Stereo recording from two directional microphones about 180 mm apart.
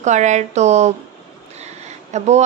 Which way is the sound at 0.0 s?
40° right (ahead or behind).